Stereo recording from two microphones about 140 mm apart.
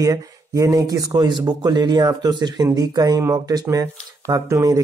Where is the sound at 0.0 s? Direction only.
25° right (ahead or behind).